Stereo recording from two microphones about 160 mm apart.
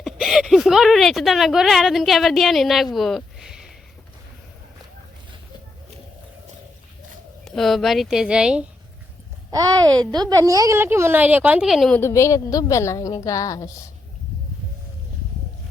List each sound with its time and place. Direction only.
0.0 s speech: centre (ahead or behind)
2.9 s a sound: centre (ahead or behind)
7.4 s speech: centre (ahead or behind)
9.5 s speech: 25° right (ahead or behind); by 11.9 s centre (ahead or behind)
11.9 s a woman's voice: 15° left (ahead or behind)